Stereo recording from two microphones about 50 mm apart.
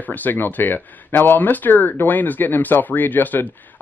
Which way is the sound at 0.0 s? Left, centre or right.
Left.